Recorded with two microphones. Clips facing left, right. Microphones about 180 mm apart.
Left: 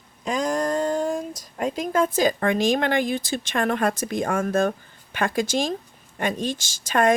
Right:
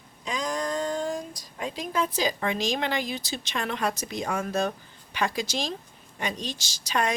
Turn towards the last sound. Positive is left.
turn(degrees=50)  # may be behind; listen again after turning